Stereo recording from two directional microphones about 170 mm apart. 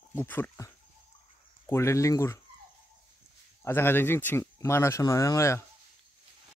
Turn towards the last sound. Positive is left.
turn(degrees=15)  # may be behind; listen again after turning